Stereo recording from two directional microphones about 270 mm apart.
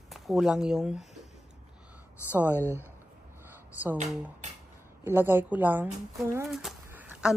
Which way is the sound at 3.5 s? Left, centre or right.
Centre.